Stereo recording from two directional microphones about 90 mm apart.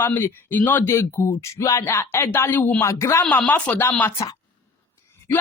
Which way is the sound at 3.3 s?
15° left (ahead or behind).